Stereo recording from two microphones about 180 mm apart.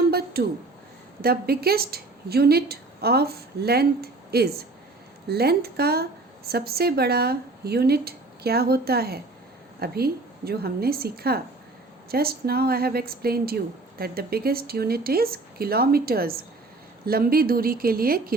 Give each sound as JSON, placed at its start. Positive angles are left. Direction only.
{"t": 0.1, "sound": "a woman's voice", "side_deg": -60}